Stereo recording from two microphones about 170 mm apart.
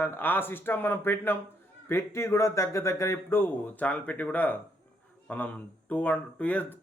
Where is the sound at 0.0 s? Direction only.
10° left (ahead or behind).